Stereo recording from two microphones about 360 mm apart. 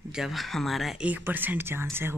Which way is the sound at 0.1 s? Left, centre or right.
Centre.